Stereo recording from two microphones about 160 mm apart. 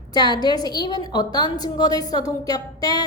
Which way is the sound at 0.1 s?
25° left (ahead or behind).